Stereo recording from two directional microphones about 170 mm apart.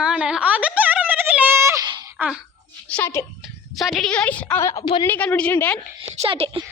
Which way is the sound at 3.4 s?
Centre (ahead or behind).